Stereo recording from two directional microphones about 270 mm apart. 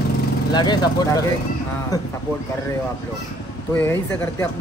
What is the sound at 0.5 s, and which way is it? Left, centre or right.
Speech, centre.